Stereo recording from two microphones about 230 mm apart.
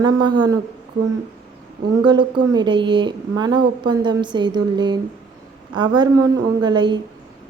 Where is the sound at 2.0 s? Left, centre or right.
Centre.